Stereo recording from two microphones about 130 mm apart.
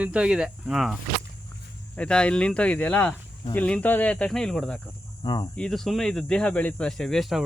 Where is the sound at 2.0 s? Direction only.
10° left (ahead or behind).